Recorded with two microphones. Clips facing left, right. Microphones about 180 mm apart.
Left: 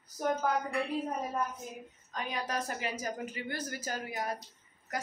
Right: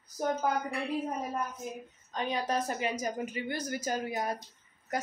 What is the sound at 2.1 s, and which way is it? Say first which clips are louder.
A woman's voice: right 4 dB; 25° right (ahead or behind).